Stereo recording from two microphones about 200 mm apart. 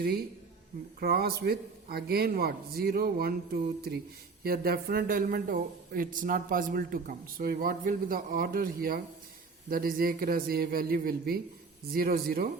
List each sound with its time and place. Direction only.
0.9 s speech: 50° right (ahead or behind)